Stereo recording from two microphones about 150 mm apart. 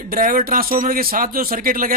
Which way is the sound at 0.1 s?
65° right (ahead or behind).